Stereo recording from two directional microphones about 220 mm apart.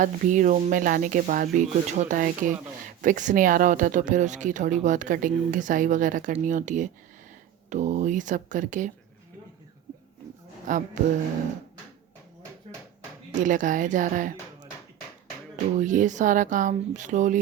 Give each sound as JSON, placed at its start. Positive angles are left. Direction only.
{"t": 0.0, "sound": "speech", "side_deg": -35}
{"t": 10.7, "sound": "speech", "side_deg": -35}
{"t": 13.4, "sound": "speech", "side_deg": -35}
{"t": 15.8, "sound": "speech", "side_deg": -35}